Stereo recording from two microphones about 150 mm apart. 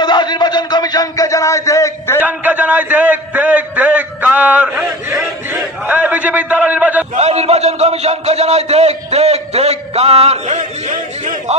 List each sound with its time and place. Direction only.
0.0 s a man's voice: 30° left (ahead or behind)
2.1 s a man's voice: 10° right (ahead or behind)
7.2 s a man's voice: 45° right (ahead or behind)